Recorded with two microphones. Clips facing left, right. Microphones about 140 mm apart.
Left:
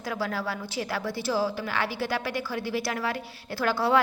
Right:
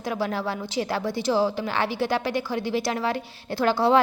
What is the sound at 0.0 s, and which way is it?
A woman's voice, 20° right (ahead or behind).